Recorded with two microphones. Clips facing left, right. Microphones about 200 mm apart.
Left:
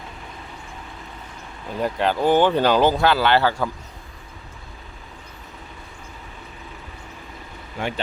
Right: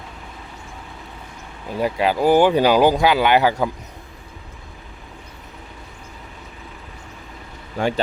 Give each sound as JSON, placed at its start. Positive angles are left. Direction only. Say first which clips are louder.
{"t": 1.8, "sound": "speech", "louder": "right 2 dB", "side_deg": -10}
{"t": 7.8, "sound": "speech", "louder": "right 6 dB", "side_deg": -40}